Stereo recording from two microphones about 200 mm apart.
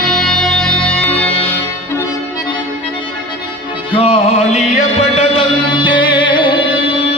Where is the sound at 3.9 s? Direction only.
30° left (ahead or behind).